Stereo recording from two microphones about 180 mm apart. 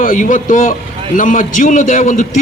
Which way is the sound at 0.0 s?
50° left (ahead or behind).